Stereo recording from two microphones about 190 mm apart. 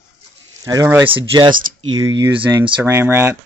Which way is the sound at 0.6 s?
20° right (ahead or behind).